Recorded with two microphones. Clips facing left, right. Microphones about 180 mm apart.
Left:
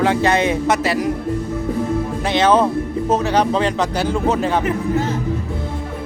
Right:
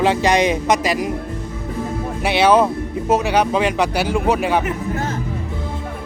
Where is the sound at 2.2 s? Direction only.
10° right (ahead or behind).